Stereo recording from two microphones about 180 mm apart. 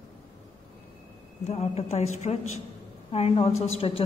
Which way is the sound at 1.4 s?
35° left (ahead or behind).